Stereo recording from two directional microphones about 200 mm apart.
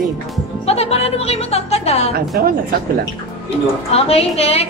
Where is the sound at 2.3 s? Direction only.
50° right (ahead or behind).